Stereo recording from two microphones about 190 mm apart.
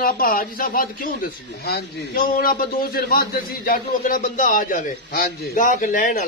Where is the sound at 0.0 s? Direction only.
50° left (ahead or behind).